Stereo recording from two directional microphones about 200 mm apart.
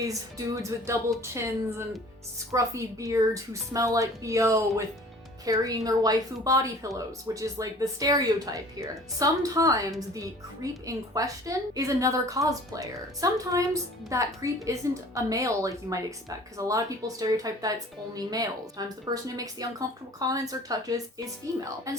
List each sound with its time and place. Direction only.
0.0 s speech: 15° right (ahead or behind)
2.5 s speech: 15° right (ahead or behind)